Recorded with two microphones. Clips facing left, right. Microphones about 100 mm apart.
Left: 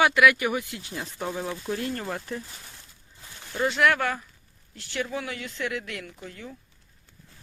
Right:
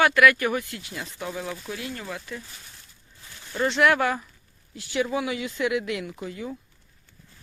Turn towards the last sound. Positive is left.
turn(degrees=-10)  # may be behind; listen again after turning